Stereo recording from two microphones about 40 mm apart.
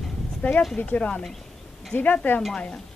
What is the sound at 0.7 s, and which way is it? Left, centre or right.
Speech, left.